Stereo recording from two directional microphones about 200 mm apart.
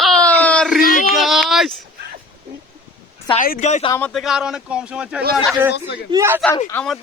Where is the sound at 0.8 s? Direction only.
45° left (ahead or behind).